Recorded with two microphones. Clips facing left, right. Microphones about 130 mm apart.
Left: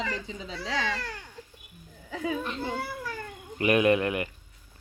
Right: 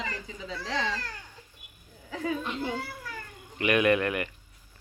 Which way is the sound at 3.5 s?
30° left (ahead or behind).